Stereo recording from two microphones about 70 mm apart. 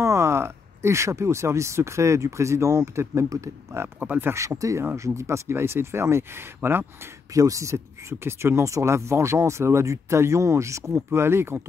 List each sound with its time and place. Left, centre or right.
0.0 s speech: right
4.0 s speech: right
4.3 s speech: right
7.3 s speech: right